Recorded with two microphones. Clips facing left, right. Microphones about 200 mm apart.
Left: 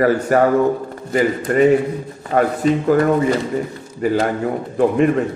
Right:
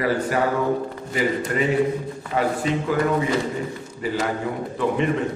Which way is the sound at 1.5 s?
50° left (ahead or behind).